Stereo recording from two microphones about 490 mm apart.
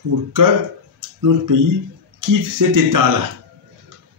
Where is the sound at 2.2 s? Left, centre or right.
Right.